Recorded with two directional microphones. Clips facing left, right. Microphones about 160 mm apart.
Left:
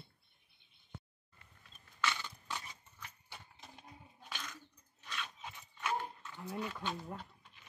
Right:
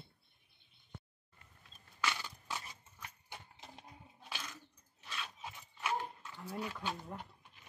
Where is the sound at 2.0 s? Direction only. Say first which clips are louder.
Left 1 dB; 10° right (ahead or behind).